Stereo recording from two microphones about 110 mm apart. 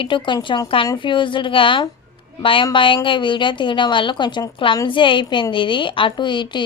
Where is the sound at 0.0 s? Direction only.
50° left (ahead or behind).